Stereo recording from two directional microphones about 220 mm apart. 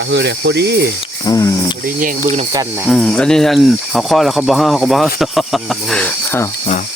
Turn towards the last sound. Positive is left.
turn(degrees=5)  # may be behind; listen again after turning